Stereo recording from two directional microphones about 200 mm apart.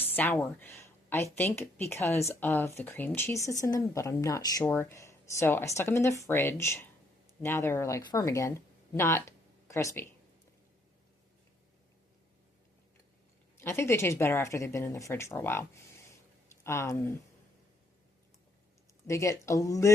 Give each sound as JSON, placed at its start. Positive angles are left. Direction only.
{"t": 0.2, "sound": "speech", "side_deg": 10}
{"t": 13.6, "sound": "speech", "side_deg": 15}
{"t": 19.0, "sound": "speech", "side_deg": 15}